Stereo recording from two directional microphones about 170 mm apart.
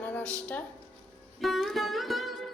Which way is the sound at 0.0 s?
10° left (ahead or behind).